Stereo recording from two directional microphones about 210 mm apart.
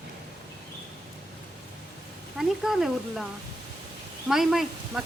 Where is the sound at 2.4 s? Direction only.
Centre (ahead or behind).